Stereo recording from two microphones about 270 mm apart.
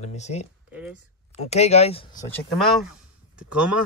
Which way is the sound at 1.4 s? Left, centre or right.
Left.